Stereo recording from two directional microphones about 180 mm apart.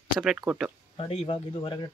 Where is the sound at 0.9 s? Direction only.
30° left (ahead or behind).